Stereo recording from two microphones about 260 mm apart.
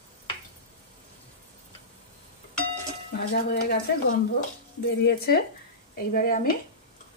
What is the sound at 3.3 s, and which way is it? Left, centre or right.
Speech, left.